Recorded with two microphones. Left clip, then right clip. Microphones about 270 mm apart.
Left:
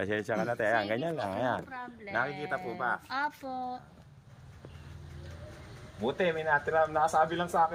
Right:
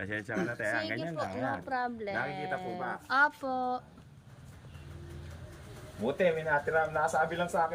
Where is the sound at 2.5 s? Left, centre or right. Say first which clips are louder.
Left 3 dB; centre.